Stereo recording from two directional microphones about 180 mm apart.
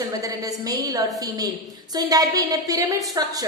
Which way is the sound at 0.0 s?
20° right (ahead or behind).